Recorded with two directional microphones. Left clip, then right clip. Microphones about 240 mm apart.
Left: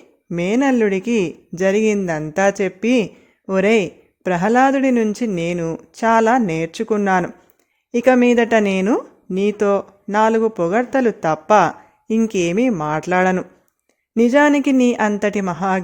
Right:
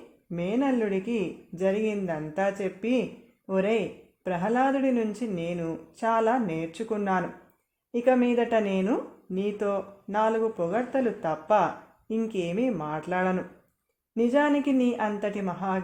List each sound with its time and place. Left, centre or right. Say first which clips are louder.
0.3 s speech: left 10 dB; left